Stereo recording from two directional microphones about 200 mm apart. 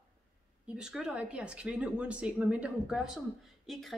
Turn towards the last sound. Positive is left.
turn(degrees=0)  # may be behind; listen again after turning